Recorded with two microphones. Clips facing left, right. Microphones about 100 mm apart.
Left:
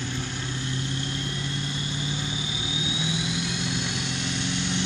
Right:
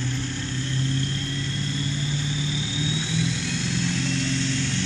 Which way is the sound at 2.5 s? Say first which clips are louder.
Right 3 dB; 15° left (ahead or behind).